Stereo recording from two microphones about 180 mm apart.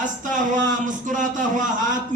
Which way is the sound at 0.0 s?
45° right (ahead or behind).